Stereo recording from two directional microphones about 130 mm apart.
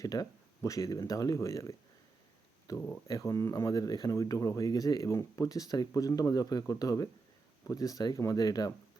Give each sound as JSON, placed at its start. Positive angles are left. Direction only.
{"t": 0.0, "sound": "speech", "side_deg": 30}